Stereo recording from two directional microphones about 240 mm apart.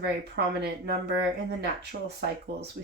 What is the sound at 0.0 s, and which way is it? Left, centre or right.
Speech, right.